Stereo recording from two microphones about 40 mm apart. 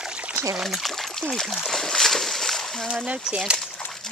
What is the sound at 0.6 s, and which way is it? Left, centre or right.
Speech, centre.